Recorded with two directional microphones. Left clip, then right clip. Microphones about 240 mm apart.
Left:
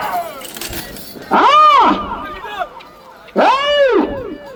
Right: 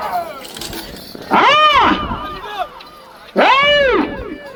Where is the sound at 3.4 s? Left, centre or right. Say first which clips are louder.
Right 1 dB; left.